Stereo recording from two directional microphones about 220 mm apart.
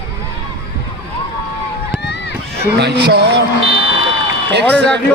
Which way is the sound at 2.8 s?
50° right (ahead or behind).